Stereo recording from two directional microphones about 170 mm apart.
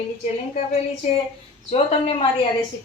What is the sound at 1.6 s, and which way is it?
Speech, 35° left (ahead or behind).